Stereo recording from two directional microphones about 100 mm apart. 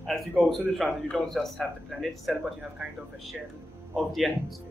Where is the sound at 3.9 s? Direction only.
Centre (ahead or behind).